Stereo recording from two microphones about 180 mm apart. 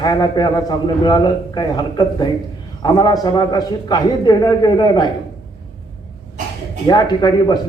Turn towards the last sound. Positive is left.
turn(degrees=25)  # may be behind; listen again after turning